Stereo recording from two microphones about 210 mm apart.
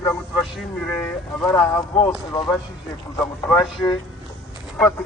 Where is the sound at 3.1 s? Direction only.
15° left (ahead or behind).